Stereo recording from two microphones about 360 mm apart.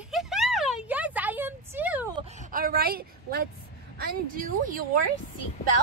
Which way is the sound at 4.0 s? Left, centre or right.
Right.